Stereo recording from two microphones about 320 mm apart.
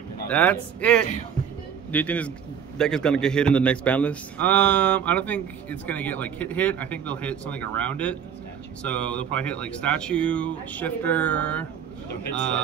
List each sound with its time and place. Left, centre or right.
0.3 s a man's voice: centre